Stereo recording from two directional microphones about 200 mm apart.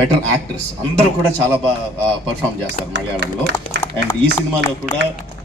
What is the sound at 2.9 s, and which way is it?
Speech, 60° right (ahead or behind).